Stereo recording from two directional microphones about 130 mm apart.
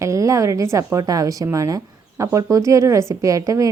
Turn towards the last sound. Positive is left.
turn(degrees=-25)  # may be behind; listen again after turning